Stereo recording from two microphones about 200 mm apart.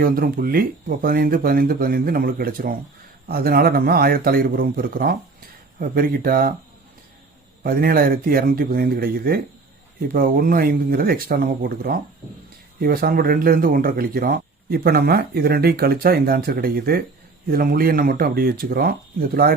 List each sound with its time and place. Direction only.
0.0 s speech: 45° right (ahead or behind)
7.6 s speech: 45° right (ahead or behind)